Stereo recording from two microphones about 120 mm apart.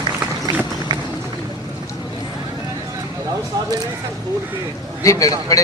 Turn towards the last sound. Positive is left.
turn(degrees=30)  # may be behind; listen again after turning